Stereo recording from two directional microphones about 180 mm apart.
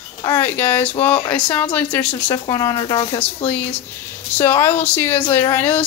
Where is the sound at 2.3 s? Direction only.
20° left (ahead or behind).